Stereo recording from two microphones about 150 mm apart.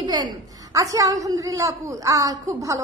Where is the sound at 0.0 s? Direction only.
30° right (ahead or behind).